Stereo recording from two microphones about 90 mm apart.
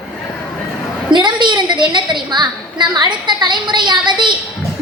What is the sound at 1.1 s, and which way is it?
A woman's voice, 55° right (ahead or behind).